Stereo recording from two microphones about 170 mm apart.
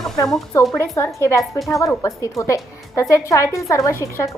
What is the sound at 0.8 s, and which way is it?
A woman's voice, 15° left (ahead or behind).